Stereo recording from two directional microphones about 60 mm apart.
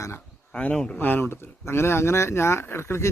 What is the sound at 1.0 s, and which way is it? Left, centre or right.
Speech, left.